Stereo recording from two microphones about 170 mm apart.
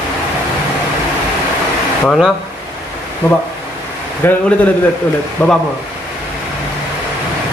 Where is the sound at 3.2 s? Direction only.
15° left (ahead or behind).